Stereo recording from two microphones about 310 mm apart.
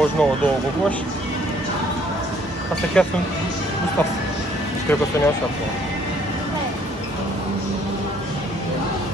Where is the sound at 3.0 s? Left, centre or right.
Centre.